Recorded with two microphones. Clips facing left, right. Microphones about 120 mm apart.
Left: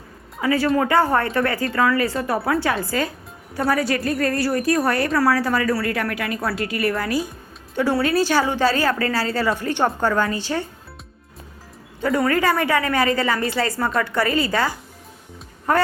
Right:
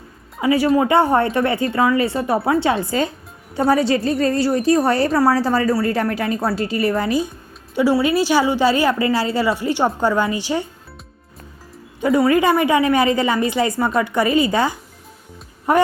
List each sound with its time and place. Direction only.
0.4 s a woman's voice: 15° right (ahead or behind)
7.8 s a woman's voice: 10° right (ahead or behind)
11.9 s a woman's voice: 15° right (ahead or behind)